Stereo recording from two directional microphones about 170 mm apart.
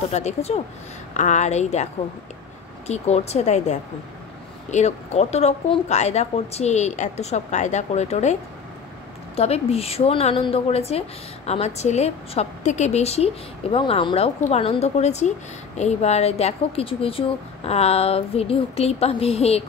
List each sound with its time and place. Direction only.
0.1 s a woman's voice: 40° left (ahead or behind)
2.9 s a woman's voice: 40° left (ahead or behind)